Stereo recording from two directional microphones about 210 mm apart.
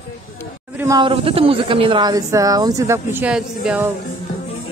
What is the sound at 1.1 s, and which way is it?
Speech, 25° right (ahead or behind).